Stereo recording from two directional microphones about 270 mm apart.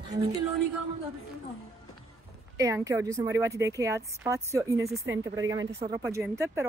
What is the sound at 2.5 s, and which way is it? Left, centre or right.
Speech, centre.